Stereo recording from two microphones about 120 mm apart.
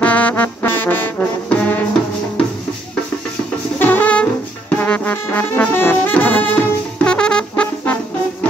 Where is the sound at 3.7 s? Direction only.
15° left (ahead or behind).